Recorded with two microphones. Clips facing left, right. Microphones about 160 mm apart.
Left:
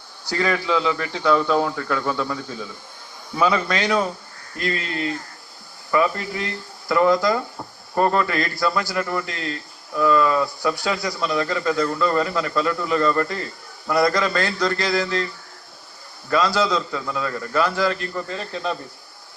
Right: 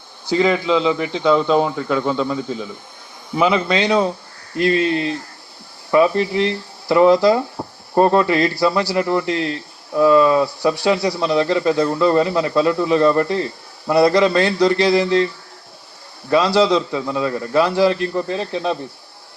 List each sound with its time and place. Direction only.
0.3 s speech: 20° right (ahead or behind)
16.6 s speech: 25° right (ahead or behind)